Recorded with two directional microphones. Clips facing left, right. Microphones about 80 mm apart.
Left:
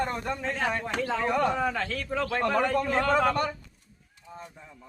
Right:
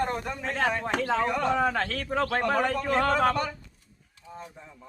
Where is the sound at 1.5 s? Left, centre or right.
Right.